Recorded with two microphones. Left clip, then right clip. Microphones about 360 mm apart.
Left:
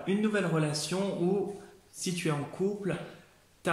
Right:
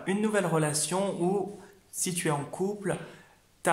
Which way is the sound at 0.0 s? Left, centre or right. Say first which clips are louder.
Right 2 dB; centre.